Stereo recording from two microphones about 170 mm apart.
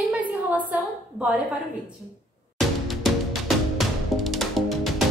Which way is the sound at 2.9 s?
Centre (ahead or behind).